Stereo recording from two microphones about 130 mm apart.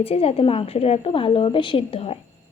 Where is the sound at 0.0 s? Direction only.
50° left (ahead or behind).